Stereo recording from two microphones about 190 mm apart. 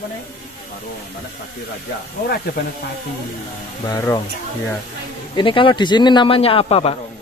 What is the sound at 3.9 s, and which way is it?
Speech, 20° left (ahead or behind).